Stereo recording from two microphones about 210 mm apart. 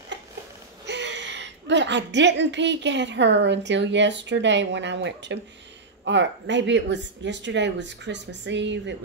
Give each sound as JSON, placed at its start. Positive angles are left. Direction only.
{"t": 0.8, "sound": "a woman's voice", "side_deg": -55}